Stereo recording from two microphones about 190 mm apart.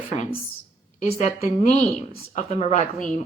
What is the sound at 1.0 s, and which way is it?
Speech, 35° left (ahead or behind).